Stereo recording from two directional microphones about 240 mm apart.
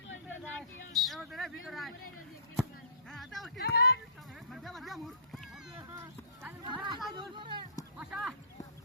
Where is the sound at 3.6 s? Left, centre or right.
Left.